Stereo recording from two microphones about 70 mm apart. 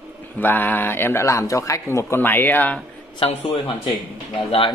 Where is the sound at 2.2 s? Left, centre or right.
Left.